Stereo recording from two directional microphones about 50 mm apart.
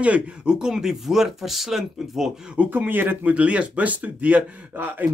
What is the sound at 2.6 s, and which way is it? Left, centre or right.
Speech, right.